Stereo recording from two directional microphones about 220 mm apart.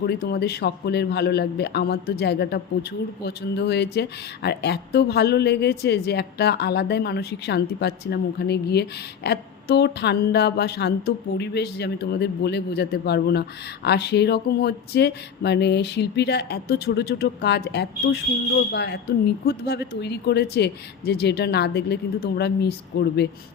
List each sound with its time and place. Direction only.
0.0 s speech: 45° left (ahead or behind)